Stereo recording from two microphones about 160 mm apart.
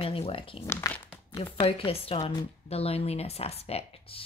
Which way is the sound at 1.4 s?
35° left (ahead or behind).